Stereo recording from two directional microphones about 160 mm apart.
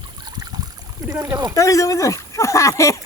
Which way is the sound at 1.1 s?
20° right (ahead or behind).